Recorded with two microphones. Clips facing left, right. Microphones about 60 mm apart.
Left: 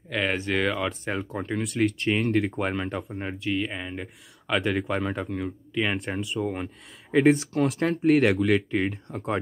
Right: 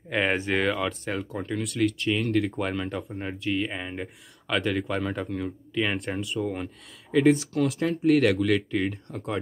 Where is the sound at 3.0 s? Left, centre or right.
Centre.